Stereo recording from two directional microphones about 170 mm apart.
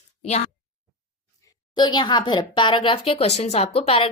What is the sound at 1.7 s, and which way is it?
Speech, 25° left (ahead or behind).